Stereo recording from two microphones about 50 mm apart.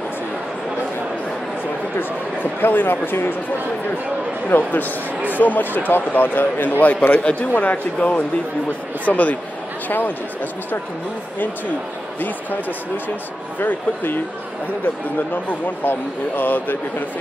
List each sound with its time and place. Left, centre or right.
2.6 s a man's voice: left
4.5 s speech: left
6.8 s a man's voice: left
12.2 s speech: left
15.6 s speech: left